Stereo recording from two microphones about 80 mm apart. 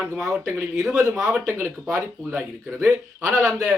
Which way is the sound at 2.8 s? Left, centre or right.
Centre.